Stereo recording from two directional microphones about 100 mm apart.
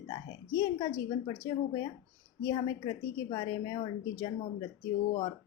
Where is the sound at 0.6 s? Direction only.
45° left (ahead or behind).